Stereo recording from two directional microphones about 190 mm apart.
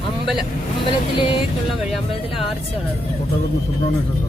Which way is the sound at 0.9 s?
25° left (ahead or behind).